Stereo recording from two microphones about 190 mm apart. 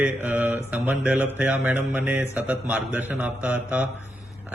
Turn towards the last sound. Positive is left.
turn(degrees=-5)  # may be behind; listen again after turning